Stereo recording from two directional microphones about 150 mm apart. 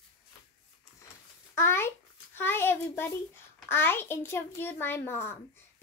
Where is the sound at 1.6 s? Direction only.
15° left (ahead or behind).